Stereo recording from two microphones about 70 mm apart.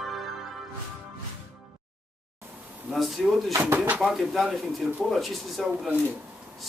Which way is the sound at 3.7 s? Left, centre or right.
Right.